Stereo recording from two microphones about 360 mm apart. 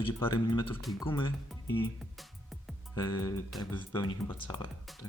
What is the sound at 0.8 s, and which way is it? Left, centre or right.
Speech, centre.